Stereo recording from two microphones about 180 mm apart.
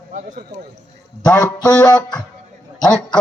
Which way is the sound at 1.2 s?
10° left (ahead or behind).